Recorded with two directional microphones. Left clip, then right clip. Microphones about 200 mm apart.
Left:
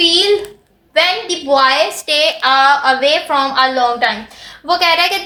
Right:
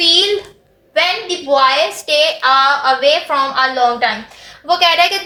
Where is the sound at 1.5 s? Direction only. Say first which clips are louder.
Even; 45° left (ahead or behind).